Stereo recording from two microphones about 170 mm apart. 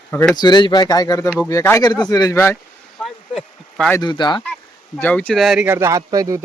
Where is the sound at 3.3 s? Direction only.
5° left (ahead or behind).